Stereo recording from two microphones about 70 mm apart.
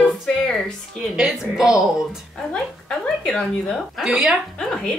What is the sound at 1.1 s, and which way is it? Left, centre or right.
Speech, centre.